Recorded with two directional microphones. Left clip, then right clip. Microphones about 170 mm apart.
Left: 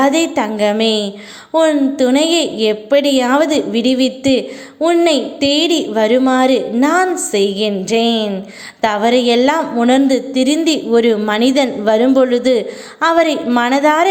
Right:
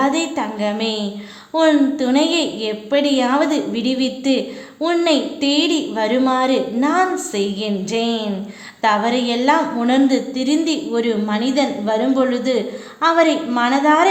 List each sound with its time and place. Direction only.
0.0 s a woman's voice: 30° left (ahead or behind)